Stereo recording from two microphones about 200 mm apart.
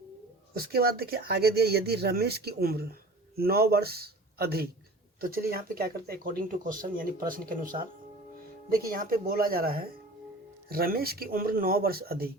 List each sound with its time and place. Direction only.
0.5 s speech: 50° right (ahead or behind)